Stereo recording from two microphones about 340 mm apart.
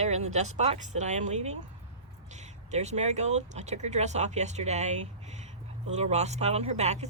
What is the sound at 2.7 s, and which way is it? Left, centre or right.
Speech, centre.